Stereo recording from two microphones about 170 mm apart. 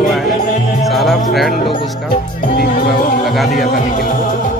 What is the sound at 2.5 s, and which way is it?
Music, 55° left (ahead or behind).